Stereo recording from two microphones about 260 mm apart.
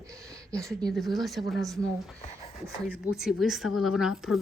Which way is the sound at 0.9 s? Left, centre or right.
Centre.